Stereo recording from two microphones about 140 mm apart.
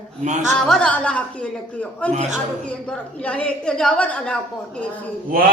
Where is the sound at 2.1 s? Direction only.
55° right (ahead or behind).